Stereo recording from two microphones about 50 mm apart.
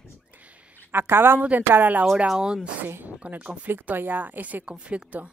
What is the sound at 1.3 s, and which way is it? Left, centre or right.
Speech, right.